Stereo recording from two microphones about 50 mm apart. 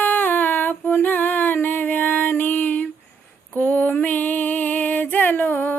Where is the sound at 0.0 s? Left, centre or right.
Left.